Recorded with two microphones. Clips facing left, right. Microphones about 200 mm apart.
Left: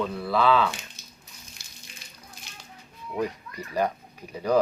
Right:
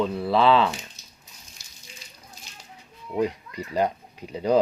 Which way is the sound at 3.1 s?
15° right (ahead or behind).